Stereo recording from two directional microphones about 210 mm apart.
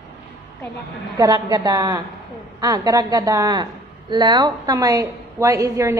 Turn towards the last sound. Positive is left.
turn(degrees=-15)  # may be behind; listen again after turning